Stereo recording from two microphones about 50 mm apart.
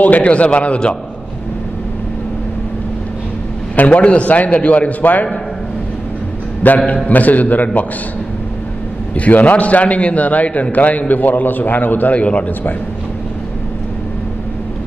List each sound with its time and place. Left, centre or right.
0.0 s a man's voice: left
3.7 s a man's voice: left
6.6 s a man's voice: left
9.1 s a man's voice: left